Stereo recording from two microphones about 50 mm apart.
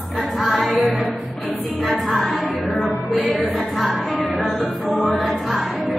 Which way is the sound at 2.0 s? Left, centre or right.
Centre.